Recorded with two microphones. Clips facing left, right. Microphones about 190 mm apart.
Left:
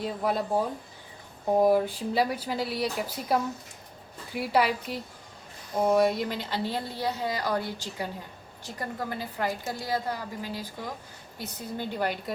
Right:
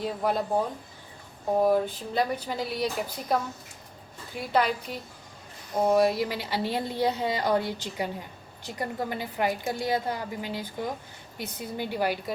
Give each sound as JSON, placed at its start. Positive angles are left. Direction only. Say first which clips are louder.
{"t": 0.0, "sound": "speech", "louder": "right 1 dB", "side_deg": 0}
{"t": 1.5, "sound": "speech", "louder": "left 1 dB", "side_deg": 10}
{"t": 4.4, "sound": "a woman's voice", "louder": "left 1 dB", "side_deg": 5}